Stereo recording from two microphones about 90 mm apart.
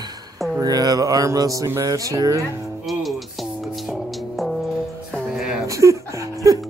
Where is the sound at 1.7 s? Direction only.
35° right (ahead or behind).